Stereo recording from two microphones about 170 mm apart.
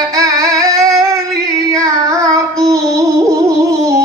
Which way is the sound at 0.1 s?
20° right (ahead or behind).